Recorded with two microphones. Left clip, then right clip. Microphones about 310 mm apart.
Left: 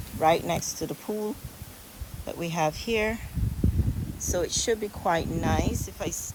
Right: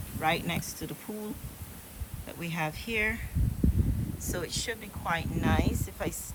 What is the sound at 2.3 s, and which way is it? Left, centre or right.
Speech, centre.